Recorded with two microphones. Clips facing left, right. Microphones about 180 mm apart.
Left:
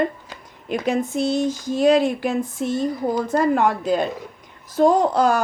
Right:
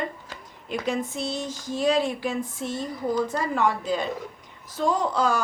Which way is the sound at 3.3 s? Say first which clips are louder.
Left 6 dB; 50° left (ahead or behind).